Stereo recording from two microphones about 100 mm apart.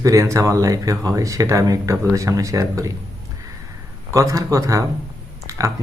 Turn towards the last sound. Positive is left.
turn(degrees=-35)  # may be behind; listen again after turning